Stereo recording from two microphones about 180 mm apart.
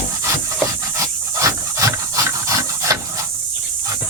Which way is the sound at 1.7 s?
20° right (ahead or behind).